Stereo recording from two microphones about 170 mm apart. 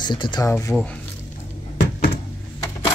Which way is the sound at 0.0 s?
25° left (ahead or behind).